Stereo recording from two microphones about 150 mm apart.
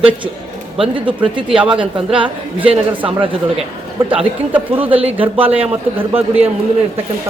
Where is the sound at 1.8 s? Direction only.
35° right (ahead or behind).